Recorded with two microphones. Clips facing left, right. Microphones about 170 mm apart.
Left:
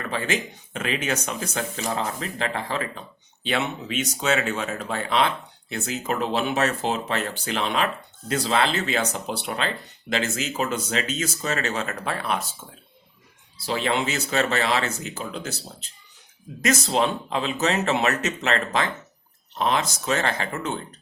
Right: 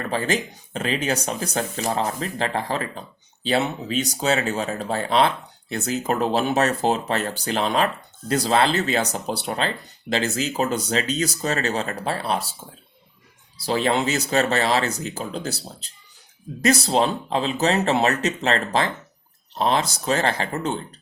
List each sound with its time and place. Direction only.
0.0 s speech: 35° right (ahead or behind)
13.6 s speech: 40° right (ahead or behind)